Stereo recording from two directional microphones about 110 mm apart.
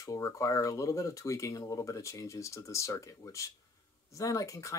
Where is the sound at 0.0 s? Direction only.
30° left (ahead or behind).